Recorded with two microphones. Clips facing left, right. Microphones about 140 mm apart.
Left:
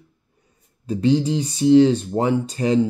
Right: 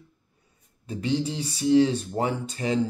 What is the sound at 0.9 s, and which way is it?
Speech, 35° left (ahead or behind).